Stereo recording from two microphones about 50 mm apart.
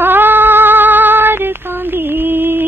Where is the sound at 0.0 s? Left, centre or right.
Right.